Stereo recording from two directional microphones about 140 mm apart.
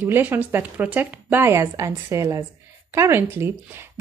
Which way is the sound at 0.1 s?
15° right (ahead or behind).